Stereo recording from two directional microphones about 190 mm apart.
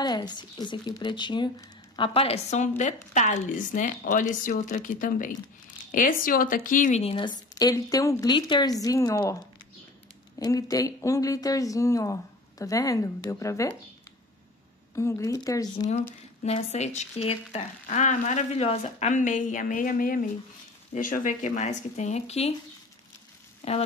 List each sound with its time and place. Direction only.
0.0 s a woman's voice: 20° left (ahead or behind)
10.4 s speech: 20° left (ahead or behind)
15.0 s speech: 15° left (ahead or behind)
16.4 s speech: 35° left (ahead or behind)
23.6 s speech: 35° left (ahead or behind)